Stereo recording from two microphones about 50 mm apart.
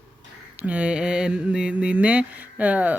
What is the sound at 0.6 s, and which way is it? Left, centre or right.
Mantra, right.